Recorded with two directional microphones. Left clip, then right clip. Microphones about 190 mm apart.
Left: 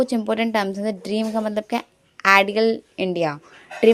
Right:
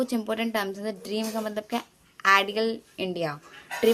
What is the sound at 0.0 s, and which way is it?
A woman's voice, 30° left (ahead or behind).